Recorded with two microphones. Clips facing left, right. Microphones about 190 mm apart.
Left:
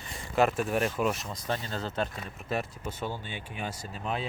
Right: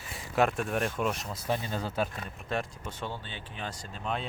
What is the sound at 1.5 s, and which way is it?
Speech, 15° right (ahead or behind).